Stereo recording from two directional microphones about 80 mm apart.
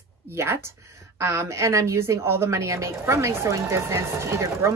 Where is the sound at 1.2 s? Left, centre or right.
Right.